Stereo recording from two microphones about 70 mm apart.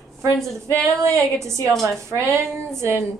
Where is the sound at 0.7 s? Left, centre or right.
Centre.